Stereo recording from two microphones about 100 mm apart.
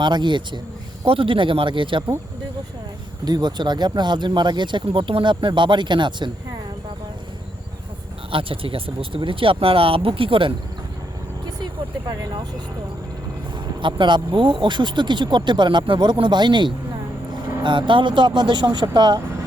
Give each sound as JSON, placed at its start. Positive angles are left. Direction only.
{"t": 0.0, "sound": "speech", "side_deg": -50}
{"t": 1.0, "sound": "speech", "side_deg": -65}
{"t": 3.2, "sound": "speech", "side_deg": -45}
{"t": 8.3, "sound": "speech", "side_deg": -60}
{"t": 11.4, "sound": "vehicle", "side_deg": -40}
{"t": 13.8, "sound": "speech", "side_deg": -50}